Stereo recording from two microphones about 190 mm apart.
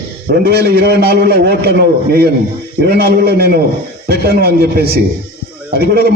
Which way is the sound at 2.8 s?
55° right (ahead or behind).